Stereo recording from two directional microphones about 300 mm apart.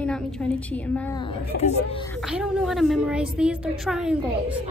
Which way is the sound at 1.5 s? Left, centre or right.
Left.